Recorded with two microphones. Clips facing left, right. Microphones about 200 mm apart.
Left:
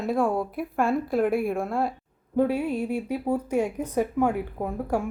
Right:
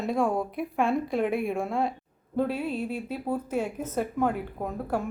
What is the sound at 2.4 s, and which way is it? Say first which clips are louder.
Speech: left 4 dB; 10° left (ahead or behind).